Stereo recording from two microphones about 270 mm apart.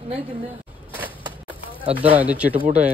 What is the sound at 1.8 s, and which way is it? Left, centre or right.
Speech, centre.